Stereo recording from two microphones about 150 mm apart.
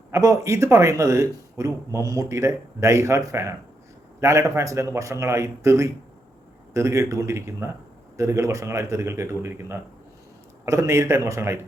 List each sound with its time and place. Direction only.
0.1 s speech: 20° right (ahead or behind)